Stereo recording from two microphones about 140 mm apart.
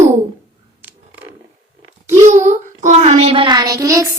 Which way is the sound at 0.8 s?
15° right (ahead or behind).